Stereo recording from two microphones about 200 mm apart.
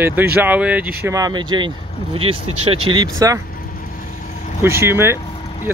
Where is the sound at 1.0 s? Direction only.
15° right (ahead or behind).